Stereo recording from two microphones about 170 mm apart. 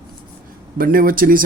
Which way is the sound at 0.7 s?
55° right (ahead or behind).